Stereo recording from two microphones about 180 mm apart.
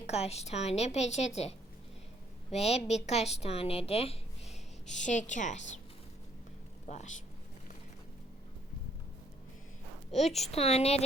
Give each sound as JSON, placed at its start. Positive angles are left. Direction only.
{"t": 0.0, "sound": "a woman's voice", "side_deg": 35}
{"t": 6.8, "sound": "speech", "side_deg": 40}
{"t": 10.1, "sound": "a woman's voice", "side_deg": 40}